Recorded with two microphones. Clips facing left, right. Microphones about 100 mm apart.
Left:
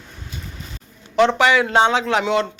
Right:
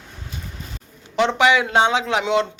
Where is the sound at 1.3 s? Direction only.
15° right (ahead or behind).